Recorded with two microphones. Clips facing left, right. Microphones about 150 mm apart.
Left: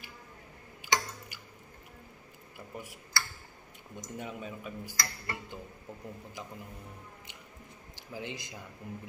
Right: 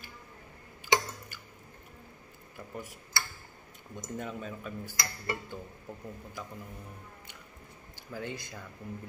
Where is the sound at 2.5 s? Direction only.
10° left (ahead or behind).